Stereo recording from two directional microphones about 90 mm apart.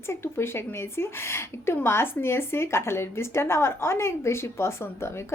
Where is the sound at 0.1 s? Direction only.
30° left (ahead or behind).